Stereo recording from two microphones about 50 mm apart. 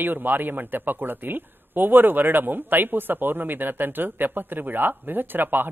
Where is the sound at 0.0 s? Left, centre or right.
Right.